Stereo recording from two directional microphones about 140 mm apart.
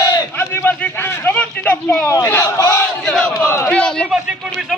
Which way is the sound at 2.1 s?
20° left (ahead or behind).